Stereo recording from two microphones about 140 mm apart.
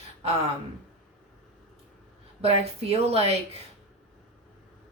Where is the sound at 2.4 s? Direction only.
45° right (ahead or behind).